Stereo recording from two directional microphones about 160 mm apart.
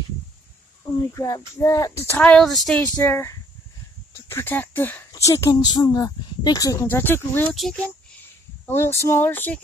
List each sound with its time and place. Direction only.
1.1 s speech: 20° left (ahead or behind)
2.0 s speech: 10° left (ahead or behind)
7.5 s speech: centre (ahead or behind)
8.6 s speech: 15° left (ahead or behind)